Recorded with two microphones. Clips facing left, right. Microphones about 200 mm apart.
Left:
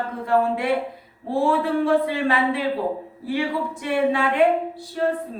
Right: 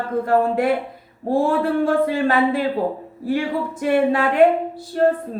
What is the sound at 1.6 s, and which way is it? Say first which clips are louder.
Speech: right 2 dB; 50° right (ahead or behind).